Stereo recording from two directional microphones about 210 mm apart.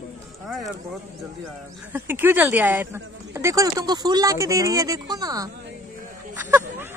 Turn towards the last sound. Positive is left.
turn(degrees=-10)  # may be behind; listen again after turning